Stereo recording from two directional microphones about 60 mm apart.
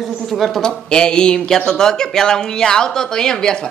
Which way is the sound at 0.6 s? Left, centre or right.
Centre.